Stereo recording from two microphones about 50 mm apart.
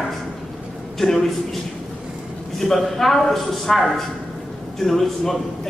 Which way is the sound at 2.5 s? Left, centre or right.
Centre.